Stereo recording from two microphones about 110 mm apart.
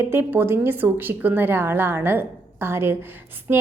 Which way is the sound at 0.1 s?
20° right (ahead or behind).